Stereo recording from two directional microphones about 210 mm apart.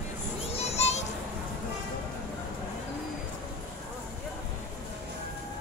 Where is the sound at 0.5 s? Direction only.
30° left (ahead or behind).